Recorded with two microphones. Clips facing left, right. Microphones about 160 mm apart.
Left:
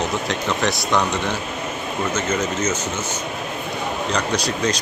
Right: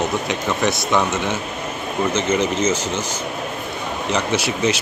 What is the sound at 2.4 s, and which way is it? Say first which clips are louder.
Speech: right 3 dB; 30° right (ahead or behind).